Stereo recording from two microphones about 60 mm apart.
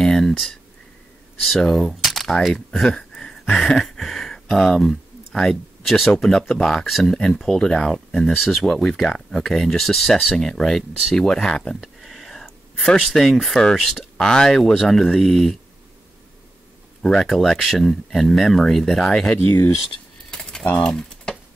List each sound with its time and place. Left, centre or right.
0.0 s a sound: centre
1.4 s speech: centre
17.0 s speech: centre
19.3 s speech: left
20.6 s speech: left